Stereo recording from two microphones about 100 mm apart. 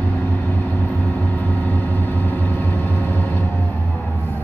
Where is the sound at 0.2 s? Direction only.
20° left (ahead or behind).